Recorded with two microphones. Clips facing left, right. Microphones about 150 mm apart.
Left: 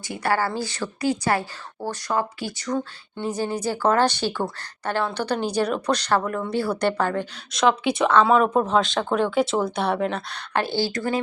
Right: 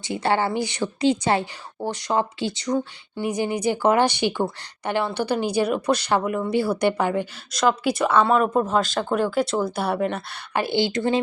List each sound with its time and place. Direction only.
0.0 s a woman's voice: 25° right (ahead or behind)